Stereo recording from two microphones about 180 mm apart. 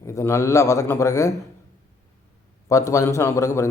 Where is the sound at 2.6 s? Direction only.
20° left (ahead or behind).